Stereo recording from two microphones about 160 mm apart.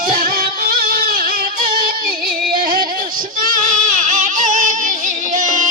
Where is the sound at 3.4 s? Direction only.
55° right (ahead or behind).